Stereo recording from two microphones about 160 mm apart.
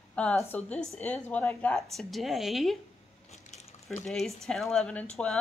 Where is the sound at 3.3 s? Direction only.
45° left (ahead or behind).